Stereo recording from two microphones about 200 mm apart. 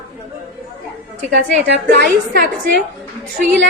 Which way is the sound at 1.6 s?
55° right (ahead or behind).